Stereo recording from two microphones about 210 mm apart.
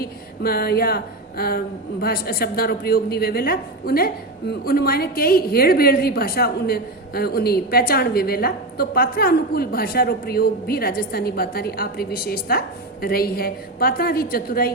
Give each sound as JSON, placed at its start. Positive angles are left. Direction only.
{"t": 0.0, "sound": "speech", "side_deg": 45}